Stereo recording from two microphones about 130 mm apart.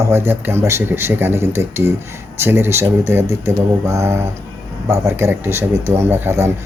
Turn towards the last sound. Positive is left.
turn(degrees=-20)  # may be behind; listen again after turning